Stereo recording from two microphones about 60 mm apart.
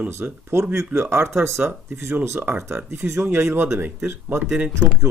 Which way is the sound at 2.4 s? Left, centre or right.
Right.